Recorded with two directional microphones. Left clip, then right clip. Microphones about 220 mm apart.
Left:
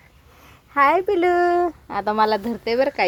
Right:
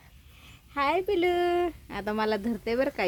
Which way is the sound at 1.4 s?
15° right (ahead or behind).